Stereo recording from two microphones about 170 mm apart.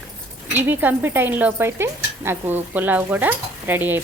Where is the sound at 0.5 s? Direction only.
10° right (ahead or behind).